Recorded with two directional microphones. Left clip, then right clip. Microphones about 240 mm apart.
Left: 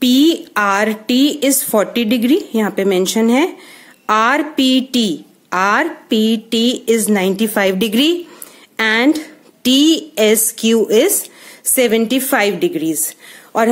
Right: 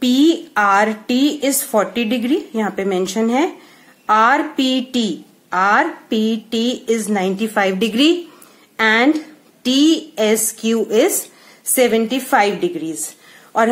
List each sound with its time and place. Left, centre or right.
0.0 s a woman's voice: left